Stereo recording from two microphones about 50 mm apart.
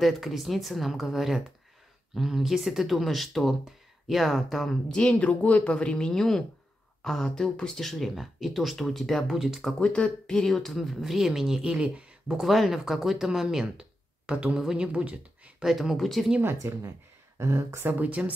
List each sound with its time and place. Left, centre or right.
0.0 s speech: centre
5.2 s speech: left; by 7.8 s centre
7.8 s speech: centre
9.3 s speech: centre
9.8 s speech: left
10.2 s speech: centre; by 15.5 s right
15.6 s speech: centre
16.6 s speech: right
17.4 s speech: right
17.8 s speech: right